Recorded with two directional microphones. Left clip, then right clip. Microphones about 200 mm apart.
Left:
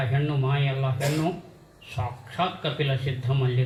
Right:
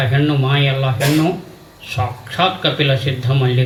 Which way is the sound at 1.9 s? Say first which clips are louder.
Right 10 dB; 45° right (ahead or behind).